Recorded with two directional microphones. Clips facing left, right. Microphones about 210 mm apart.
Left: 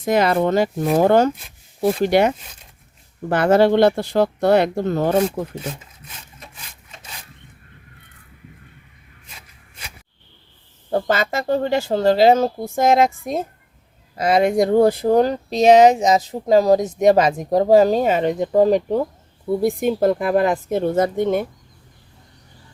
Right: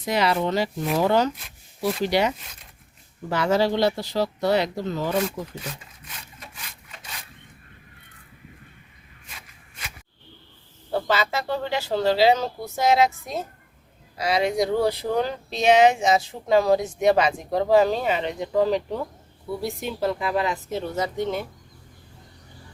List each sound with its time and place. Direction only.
0.0 s speech: 50° left (ahead or behind)
10.9 s speech: 50° left (ahead or behind)